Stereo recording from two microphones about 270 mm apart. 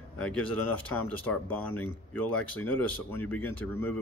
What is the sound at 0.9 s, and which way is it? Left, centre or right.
Speech, centre.